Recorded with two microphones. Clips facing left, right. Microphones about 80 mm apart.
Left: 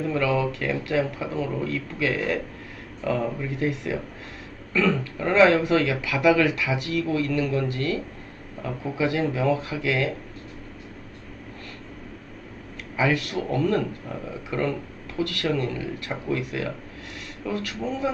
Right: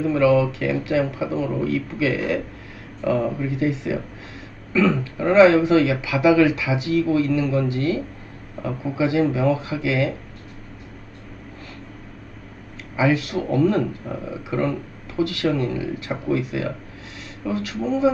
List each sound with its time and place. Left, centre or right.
0.0 s speech: centre
13.0 s speech: centre